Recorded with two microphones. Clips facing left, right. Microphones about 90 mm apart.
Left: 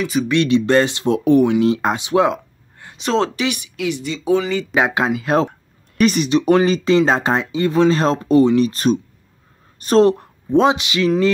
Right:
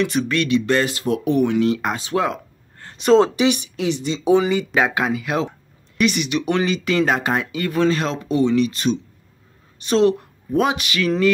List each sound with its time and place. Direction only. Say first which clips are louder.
0.0 s speech: even; 5° left (ahead or behind)
0.3 s speech: left 4 dB; 30° left (ahead or behind)
3.0 s speech: right 5 dB; centre (ahead or behind)
3.3 s speech: right 3 dB; 25° right (ahead or behind)
4.7 s speech: left 5 dB; 20° left (ahead or behind)
5.2 s speech: left 5 dB; 40° left (ahead or behind)
7.9 s speech: left 7 dB; 35° left (ahead or behind); by 11.2 s 20° left (ahead or behind)